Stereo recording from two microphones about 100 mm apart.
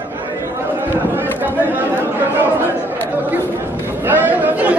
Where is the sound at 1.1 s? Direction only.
20° right (ahead or behind).